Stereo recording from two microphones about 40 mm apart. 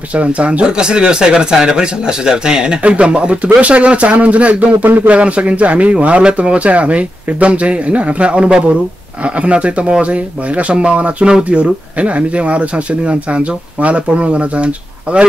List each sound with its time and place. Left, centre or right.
0.1 s speech: right